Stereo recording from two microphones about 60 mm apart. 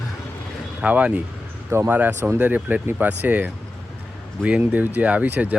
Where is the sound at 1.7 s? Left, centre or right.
Right.